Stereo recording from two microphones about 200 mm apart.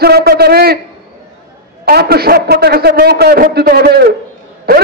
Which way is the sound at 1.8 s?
50° right (ahead or behind).